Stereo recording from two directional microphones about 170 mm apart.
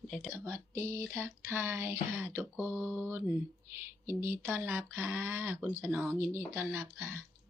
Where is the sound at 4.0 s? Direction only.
15° right (ahead or behind).